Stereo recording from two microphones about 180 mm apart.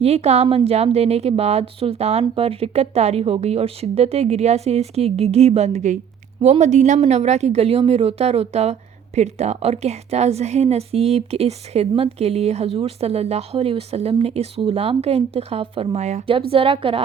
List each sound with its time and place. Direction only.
0.0 s a woman's voice: 35° right (ahead or behind)